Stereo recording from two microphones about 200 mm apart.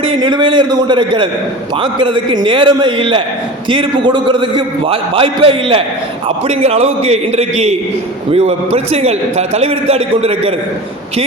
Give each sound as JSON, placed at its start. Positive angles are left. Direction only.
{"t": 0.0, "sound": "a man's voice", "side_deg": -25}